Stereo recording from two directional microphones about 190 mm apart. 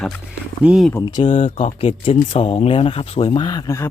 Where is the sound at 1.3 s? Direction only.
40° left (ahead or behind); by 3.8 s 20° left (ahead or behind).